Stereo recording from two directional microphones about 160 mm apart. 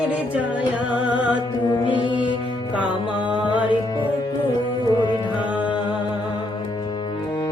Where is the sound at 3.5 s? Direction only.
30° left (ahead or behind).